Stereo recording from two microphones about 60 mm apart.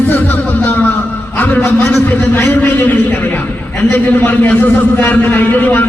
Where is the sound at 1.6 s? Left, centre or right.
Centre.